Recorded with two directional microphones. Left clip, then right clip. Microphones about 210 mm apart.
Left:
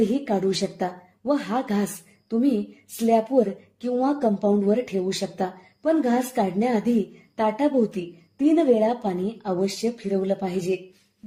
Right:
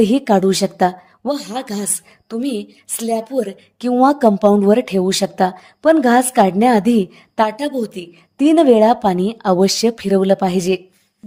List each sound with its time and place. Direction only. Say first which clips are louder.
0.1 s a woman's voice: right 9 dB; 35° right (ahead or behind)